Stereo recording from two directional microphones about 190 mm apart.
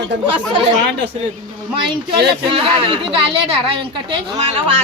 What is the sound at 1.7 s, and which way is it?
A woman's voice, 25° right (ahead or behind).